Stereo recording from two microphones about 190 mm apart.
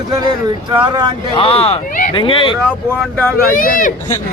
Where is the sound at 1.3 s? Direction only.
30° left (ahead or behind).